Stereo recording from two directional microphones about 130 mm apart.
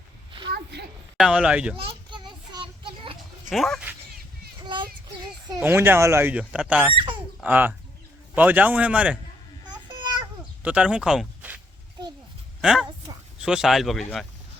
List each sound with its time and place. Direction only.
1.1 s speech: 5° right (ahead or behind)
1.7 s children playing: 45° right (ahead or behind)
3.5 s speech: centre (ahead or behind)
4.6 s child singing: 35° right (ahead or behind)
5.6 s speech: 15° right (ahead or behind)
6.9 s speech: 45° right (ahead or behind)
7.4 s speech: 15° right (ahead or behind)
9.6 s a sound: 35° right (ahead or behind)
10.6 s speech: 10° right (ahead or behind)
12.6 s speech: 5° right (ahead or behind)